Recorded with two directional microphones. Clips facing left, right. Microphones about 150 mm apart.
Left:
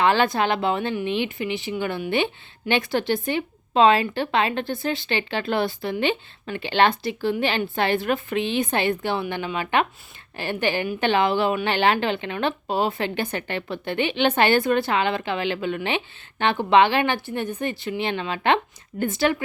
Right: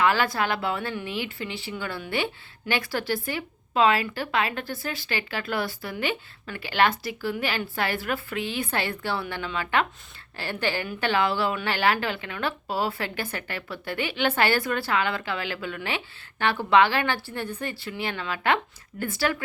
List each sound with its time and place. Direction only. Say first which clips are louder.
0.0 s speech: left 4 dB; 25° left (ahead or behind)